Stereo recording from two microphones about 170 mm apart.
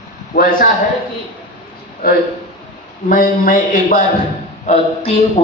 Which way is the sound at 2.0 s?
60° left (ahead or behind).